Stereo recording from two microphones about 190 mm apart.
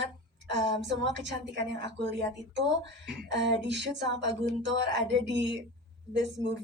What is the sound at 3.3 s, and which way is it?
A woman's voice, 65° right (ahead or behind).